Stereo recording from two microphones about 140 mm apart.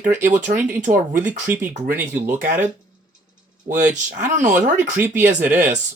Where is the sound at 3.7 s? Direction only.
65° right (ahead or behind).